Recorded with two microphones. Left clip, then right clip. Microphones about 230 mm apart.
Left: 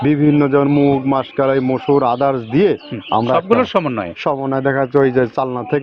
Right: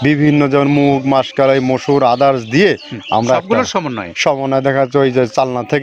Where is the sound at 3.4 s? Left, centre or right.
Centre.